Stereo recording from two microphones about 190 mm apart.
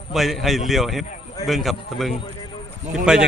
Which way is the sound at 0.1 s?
Centre (ahead or behind).